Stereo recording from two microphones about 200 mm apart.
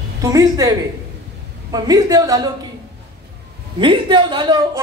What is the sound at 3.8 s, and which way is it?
Speech, 25° right (ahead or behind).